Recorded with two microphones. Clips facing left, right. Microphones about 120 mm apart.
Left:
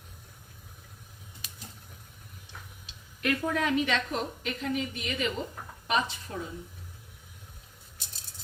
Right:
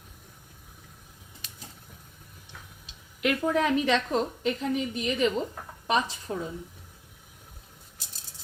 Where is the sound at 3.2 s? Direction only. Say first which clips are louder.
Right 4 dB; 15° right (ahead or behind).